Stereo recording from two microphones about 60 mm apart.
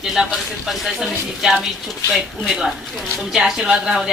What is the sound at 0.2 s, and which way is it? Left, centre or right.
A woman's voice, centre.